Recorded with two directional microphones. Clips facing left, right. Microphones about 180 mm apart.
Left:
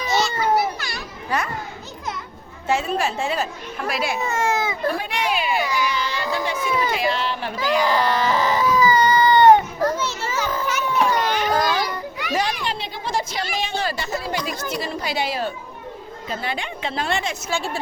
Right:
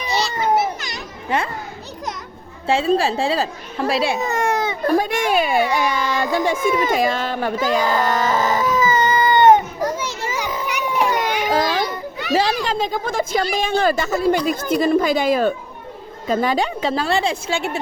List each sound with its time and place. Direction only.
0.1 s children playing: centre (ahead or behind)
0.3 s children playing: 25° right (ahead or behind)
2.6 s speech: 30° right (ahead or behind); by 8.6 s 45° right (ahead or behind)
8.7 s baby cry: 20° right (ahead or behind)
11.5 s children playing: 25° right (ahead or behind)
12.7 s speech: 45° right (ahead or behind); by 17.7 s 30° right (ahead or behind)